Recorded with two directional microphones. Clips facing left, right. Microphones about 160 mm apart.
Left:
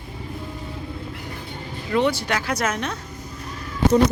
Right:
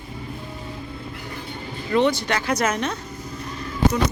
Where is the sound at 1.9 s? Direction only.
10° left (ahead or behind).